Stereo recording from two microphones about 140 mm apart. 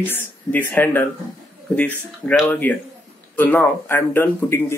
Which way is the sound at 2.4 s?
10° left (ahead or behind).